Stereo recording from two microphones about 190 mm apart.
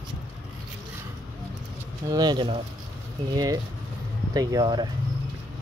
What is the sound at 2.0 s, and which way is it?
Speech, 20° right (ahead or behind).